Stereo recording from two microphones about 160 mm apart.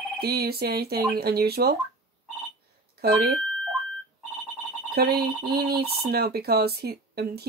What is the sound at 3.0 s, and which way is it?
Speech, 80° right.